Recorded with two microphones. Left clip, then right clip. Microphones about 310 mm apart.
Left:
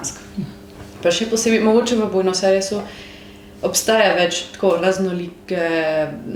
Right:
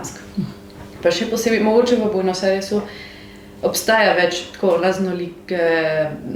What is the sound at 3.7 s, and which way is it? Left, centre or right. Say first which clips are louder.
Speech: even; left.